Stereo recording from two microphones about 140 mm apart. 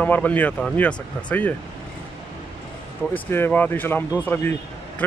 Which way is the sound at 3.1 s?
15° left (ahead or behind).